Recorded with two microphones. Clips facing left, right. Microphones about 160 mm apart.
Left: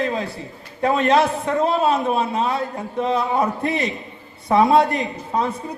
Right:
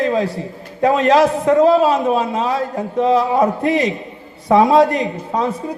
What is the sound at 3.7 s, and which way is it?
Speech, 90° right.